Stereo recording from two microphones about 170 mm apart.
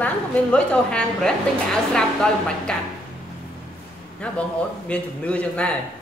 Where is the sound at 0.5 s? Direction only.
5° left (ahead or behind).